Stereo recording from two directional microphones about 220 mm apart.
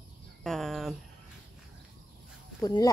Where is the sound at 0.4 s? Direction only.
Centre (ahead or behind).